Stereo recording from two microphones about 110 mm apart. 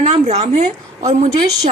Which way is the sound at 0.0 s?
70° right (ahead or behind).